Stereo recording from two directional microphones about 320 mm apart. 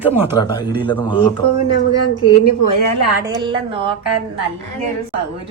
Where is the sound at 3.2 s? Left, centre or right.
Centre.